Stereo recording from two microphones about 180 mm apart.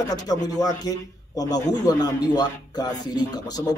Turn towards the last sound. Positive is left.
turn(degrees=20)  # may be behind; listen again after turning